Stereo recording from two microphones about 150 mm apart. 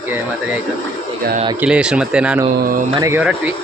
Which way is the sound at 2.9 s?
20° right (ahead or behind).